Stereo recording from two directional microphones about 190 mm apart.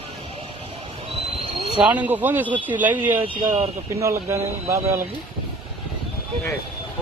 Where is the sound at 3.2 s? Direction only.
35° right (ahead or behind).